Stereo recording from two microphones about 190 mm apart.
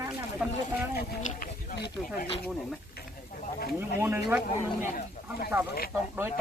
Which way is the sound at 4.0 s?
10° right (ahead or behind).